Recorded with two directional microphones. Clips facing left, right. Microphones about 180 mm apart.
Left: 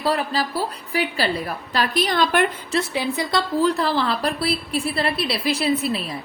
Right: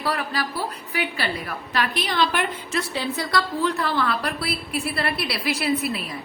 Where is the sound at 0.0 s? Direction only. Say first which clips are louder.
Left 4 dB; 30° left (ahead or behind); by 2.4 s 45° left (ahead or behind).